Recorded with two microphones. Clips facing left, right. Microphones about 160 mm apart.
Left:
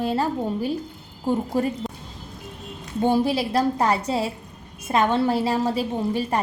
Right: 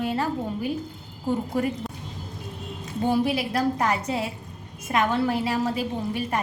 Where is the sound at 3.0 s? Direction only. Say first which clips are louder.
Left 3 dB; 30° left (ahead or behind).